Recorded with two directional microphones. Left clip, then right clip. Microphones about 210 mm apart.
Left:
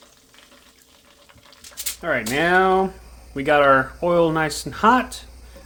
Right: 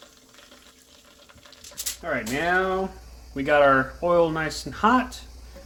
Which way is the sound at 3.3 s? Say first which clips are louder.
Left 3 dB; 20° left (ahead or behind).